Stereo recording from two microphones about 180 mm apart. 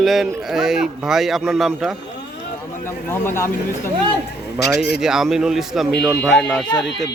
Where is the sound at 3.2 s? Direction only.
15° left (ahead or behind).